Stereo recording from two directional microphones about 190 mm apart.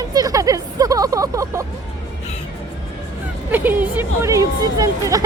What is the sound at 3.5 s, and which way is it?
Speech, 10° right (ahead or behind).